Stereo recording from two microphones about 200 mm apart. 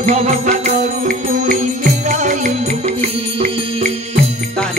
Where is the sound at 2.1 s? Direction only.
40° right (ahead or behind).